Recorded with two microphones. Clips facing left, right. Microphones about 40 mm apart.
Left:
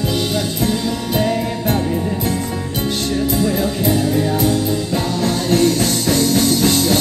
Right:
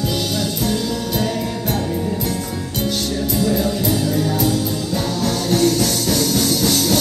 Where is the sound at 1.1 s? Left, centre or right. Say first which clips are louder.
Left 6 dB; left.